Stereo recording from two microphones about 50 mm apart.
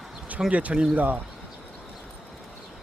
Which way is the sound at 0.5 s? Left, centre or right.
Right.